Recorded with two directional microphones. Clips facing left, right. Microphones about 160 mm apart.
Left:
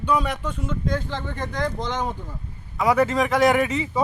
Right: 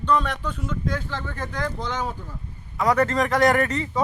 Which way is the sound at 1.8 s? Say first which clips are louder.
Left 2 dB; 5° right (ahead or behind).